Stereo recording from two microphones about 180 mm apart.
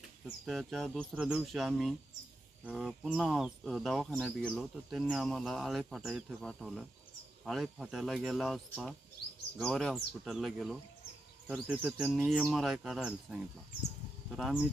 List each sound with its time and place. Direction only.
0.4 s speech: centre (ahead or behind)